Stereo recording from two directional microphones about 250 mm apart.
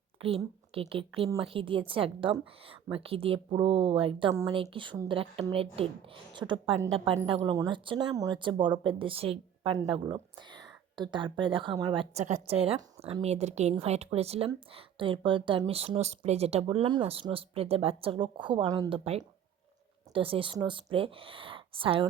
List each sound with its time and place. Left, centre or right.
0.2 s speech: right